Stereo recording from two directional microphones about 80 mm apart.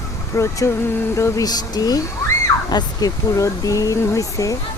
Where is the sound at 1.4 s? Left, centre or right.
Left.